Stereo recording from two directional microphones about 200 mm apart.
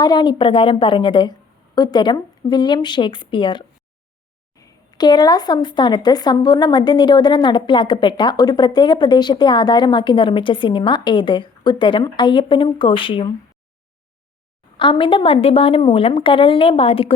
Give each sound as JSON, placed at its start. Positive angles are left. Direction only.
{"t": 0.0, "sound": "speech", "side_deg": 20}
{"t": 14.8, "sound": "speech", "side_deg": 25}